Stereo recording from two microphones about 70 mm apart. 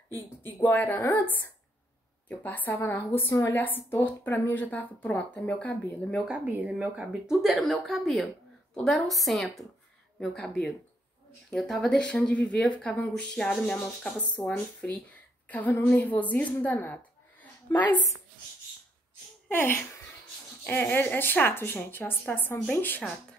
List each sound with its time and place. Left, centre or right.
0.1 s a woman's voice: left
2.8 s a woman's voice: left
5.7 s speech: centre
6.2 s speech: centre
12.0 s a woman's voice: centre
15.7 s a woman's voice: left
16.0 s a woman's voice: left
16.6 s a sound: left
19.5 s a woman's voice: left